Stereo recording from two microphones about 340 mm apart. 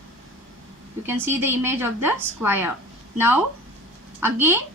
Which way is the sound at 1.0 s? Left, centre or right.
Centre.